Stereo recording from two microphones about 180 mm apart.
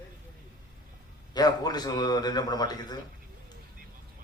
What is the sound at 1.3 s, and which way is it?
A man's voice, 20° left (ahead or behind).